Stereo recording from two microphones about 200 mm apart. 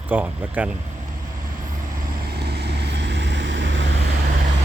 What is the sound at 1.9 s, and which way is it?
Vehicle, 45° right (ahead or behind).